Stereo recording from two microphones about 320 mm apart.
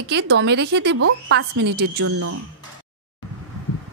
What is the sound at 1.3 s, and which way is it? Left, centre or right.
Speech, right.